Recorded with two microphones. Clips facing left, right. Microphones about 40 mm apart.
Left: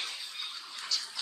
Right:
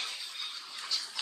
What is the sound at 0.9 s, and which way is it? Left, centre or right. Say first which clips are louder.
Bathtub: left 1 dB; right.